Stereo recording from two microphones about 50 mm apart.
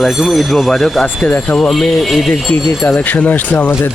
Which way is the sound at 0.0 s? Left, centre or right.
Centre.